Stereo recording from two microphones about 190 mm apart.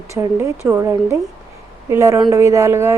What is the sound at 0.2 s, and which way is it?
Speech, 15° right (ahead or behind).